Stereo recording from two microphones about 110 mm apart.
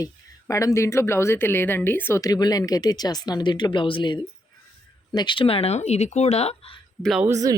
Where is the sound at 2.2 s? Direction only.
35° left (ahead or behind); by 6.7 s 75° left (ahead or behind).